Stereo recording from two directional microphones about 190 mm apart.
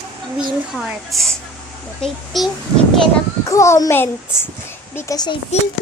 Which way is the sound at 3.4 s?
15° left (ahead or behind).